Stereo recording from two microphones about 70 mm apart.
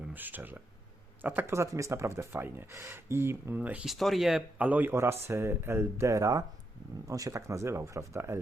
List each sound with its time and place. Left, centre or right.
0.1 s speech: right
1.5 s speech: right
3.6 s speech: right
3.8 s speech: centre
4.5 s speech: right
4.9 s speech: right